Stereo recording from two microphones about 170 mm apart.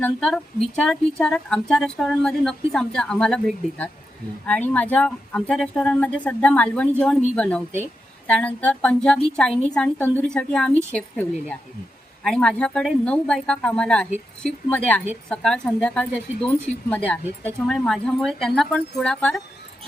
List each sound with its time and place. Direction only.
0.0 s a woman's voice: 5° left (ahead or behind)